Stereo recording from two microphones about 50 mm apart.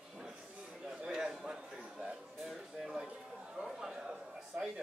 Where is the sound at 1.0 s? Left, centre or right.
Centre.